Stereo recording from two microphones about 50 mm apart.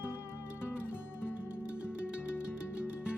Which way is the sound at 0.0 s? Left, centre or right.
Left.